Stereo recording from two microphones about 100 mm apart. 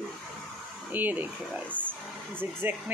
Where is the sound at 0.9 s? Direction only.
20° right (ahead or behind).